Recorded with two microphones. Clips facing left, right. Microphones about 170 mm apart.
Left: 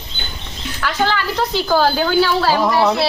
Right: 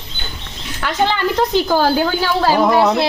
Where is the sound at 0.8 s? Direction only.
20° right (ahead or behind).